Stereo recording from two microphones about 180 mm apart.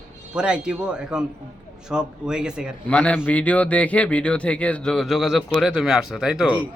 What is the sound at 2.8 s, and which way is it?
A man's voice, 5° left (ahead or behind).